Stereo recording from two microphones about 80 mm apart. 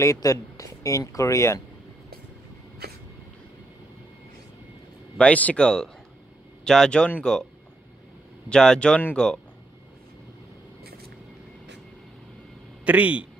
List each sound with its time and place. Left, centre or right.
0.0 s speech: left
5.1 s speech: centre
8.5 s speech: centre
12.8 s speech: centre